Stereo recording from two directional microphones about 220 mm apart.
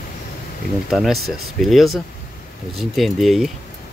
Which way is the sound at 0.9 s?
Centre (ahead or behind).